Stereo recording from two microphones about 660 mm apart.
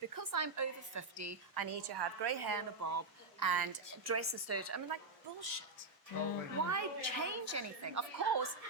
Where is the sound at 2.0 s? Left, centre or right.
Right.